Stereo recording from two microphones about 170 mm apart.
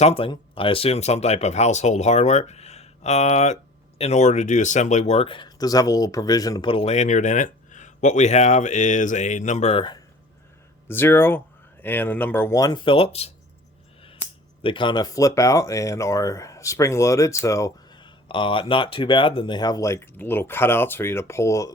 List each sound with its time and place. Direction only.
0.0 s speech: 35° left (ahead or behind)
10.8 s speech: 15° left (ahead or behind); by 13.3 s 35° left (ahead or behind)
14.6 s speech: 30° left (ahead or behind)